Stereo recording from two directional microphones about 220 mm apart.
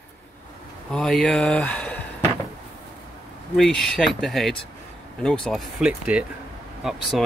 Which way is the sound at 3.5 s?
Centre (ahead or behind).